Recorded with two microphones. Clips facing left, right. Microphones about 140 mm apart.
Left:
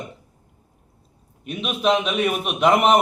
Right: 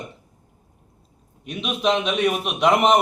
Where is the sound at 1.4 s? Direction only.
Centre (ahead or behind).